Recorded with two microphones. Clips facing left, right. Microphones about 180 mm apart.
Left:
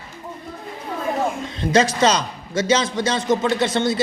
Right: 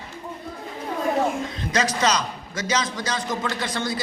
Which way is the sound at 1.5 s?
30° left (ahead or behind).